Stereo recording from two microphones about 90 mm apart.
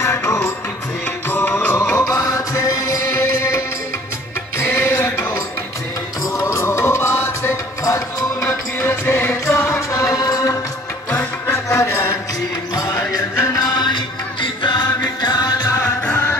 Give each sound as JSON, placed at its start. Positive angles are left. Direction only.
{"t": 0.0, "sound": "music", "side_deg": 30}
{"t": 2.0, "sound": "music", "side_deg": 35}
{"t": 7.8, "sound": "music", "side_deg": 40}
{"t": 8.5, "sound": "music", "side_deg": 25}
{"t": 11.1, "sound": "music", "side_deg": 25}
{"t": 13.6, "sound": "music", "side_deg": 55}
{"t": 15.2, "sound": "music", "side_deg": 50}
{"t": 15.8, "sound": "music", "side_deg": 30}